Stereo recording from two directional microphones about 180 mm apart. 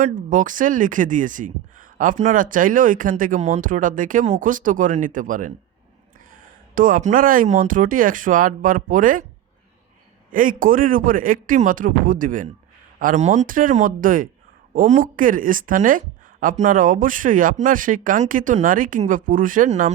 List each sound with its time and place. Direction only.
0.0 s speech: 45° right (ahead or behind)
10.3 s speech: 50° right (ahead or behind)